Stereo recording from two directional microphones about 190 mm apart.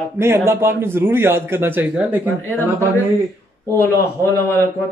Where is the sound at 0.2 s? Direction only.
15° right (ahead or behind).